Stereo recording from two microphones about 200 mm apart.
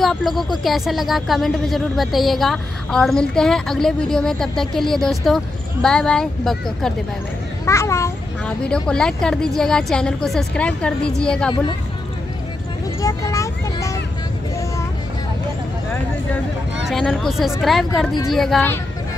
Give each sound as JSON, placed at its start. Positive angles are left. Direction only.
{"t": 0.0, "sound": "a woman's voice", "side_deg": 0}
{"t": 7.6, "sound": "a woman's voice", "side_deg": 15}
{"t": 13.0, "sound": "a sound", "side_deg": 15}
{"t": 16.8, "sound": "a woman's voice", "side_deg": 5}